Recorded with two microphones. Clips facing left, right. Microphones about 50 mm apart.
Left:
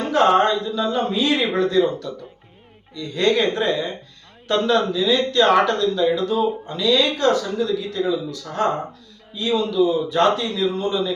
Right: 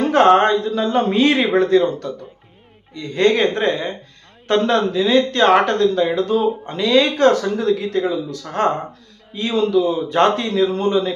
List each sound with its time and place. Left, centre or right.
0.1 s a woman's voice: right